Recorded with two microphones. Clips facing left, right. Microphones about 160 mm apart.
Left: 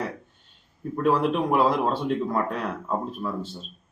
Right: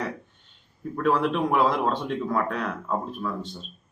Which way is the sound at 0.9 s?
10° left (ahead or behind).